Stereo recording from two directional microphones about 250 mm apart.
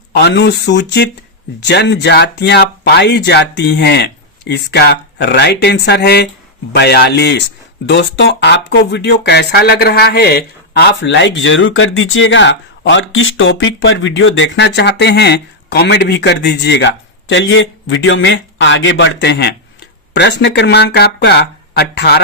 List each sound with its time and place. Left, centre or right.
0.1 s speech: left